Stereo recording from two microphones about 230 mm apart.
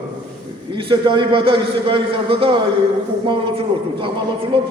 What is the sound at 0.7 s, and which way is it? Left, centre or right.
A man's voice, right.